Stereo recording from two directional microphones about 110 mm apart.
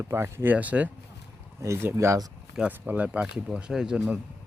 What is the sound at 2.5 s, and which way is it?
Speech, 10° right (ahead or behind).